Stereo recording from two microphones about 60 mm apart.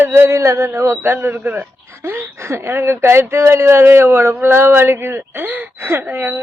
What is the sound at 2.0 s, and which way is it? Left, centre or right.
Speech, right.